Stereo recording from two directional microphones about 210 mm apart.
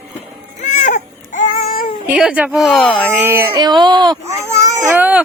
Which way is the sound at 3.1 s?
10° right (ahead or behind).